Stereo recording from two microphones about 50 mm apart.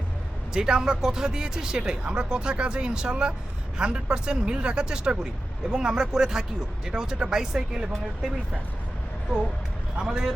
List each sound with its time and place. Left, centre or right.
0.5 s speech: centre
10.0 s speech: centre